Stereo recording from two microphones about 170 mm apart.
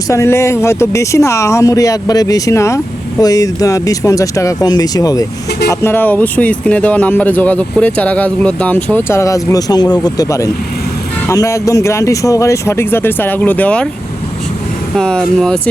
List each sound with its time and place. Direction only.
0.1 s speech: 15° left (ahead or behind)
14.9 s speech: 5° left (ahead or behind)